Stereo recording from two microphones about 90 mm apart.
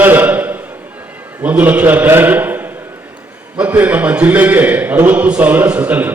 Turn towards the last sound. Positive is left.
turn(degrees=-20)  # may be behind; listen again after turning